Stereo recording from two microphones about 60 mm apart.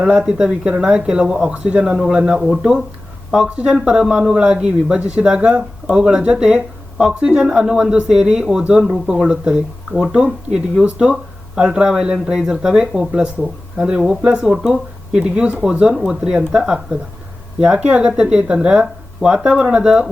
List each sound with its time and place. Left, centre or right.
0.0 s speech: centre
9.2 s speech: centre